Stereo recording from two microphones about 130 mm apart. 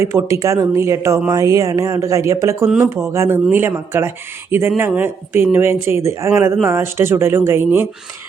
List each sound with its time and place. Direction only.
0.0 s speech: 25° right (ahead or behind)
2.6 s speech: 15° right (ahead or behind)